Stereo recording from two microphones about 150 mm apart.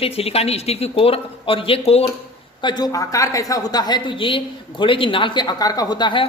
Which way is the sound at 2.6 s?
30° left (ahead or behind).